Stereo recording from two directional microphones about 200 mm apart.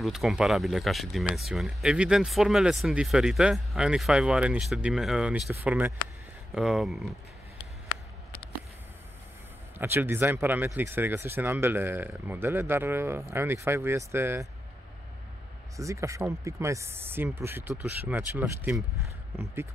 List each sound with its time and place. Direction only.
0.0 s speech: centre (ahead or behind)
9.8 s speech: 10° right (ahead or behind)
15.7 s speech: 15° right (ahead or behind)